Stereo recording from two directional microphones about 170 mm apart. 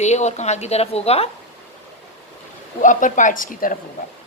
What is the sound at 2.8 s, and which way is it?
Speech, 50° left (ahead or behind).